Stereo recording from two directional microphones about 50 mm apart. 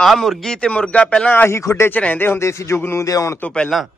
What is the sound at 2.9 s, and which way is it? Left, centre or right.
Speech, left.